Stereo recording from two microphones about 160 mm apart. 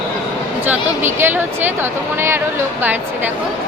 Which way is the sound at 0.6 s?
15° right (ahead or behind).